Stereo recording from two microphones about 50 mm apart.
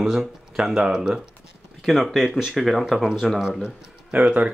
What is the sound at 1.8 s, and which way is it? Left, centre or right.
Speech, centre.